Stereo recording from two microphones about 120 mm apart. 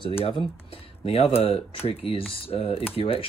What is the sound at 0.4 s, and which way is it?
Speech, 50° left (ahead or behind).